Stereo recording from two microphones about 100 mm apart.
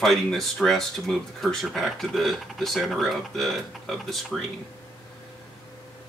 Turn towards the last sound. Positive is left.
turn(degrees=0)  # may be behind; listen again after turning